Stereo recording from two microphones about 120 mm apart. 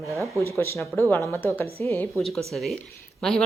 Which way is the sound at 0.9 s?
15° left (ahead or behind).